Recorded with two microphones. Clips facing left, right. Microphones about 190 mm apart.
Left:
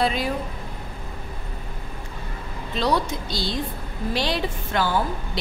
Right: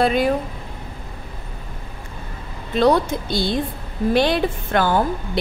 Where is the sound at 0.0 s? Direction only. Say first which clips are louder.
Right 6 dB; 55° right (ahead or behind).